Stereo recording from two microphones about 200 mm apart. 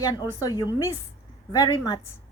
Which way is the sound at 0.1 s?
20° left (ahead or behind).